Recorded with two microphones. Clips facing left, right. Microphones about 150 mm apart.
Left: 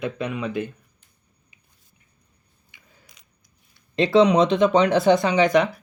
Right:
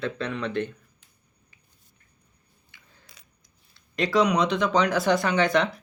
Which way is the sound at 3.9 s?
25° left (ahead or behind).